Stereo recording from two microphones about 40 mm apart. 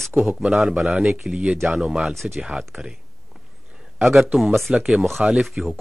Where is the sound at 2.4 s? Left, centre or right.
Centre.